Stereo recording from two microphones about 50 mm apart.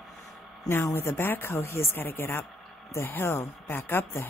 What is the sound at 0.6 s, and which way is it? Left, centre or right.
Speech, left.